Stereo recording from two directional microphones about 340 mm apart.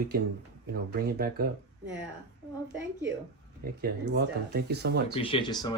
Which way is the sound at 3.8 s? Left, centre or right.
Right.